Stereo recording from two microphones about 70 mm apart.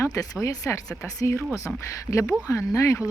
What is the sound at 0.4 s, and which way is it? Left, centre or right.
Speech, left.